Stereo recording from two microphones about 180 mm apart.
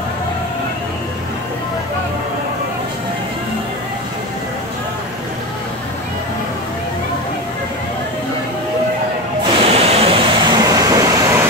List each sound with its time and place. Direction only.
9.6 s vehicle: 35° right (ahead or behind); by 11.4 s 15° right (ahead or behind)